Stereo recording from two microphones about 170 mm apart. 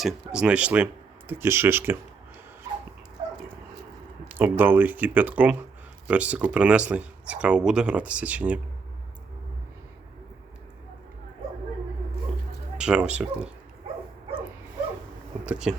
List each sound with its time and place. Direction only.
0.0 s speech: 5° right (ahead or behind)
2.7 s dog: 20° right (ahead or behind)
4.3 s speech: 10° right (ahead or behind)
12.7 s speech: 5° right (ahead or behind)
15.4 s speech: 5° right (ahead or behind)